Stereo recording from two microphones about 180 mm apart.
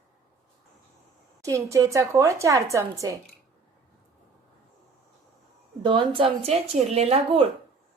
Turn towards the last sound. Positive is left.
turn(degrees=-35)  # may be behind; listen again after turning